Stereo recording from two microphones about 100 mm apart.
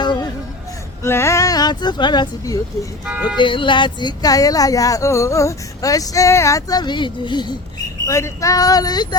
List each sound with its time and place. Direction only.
0.0 s music: 50° left (ahead or behind)
1.0 s speech: 25° left (ahead or behind); by 2.6 s 45° left (ahead or behind)
3.1 s speech: 15° right (ahead or behind)
3.3 s speech: 55° left (ahead or behind)
8.0 s speech: 30° left (ahead or behind)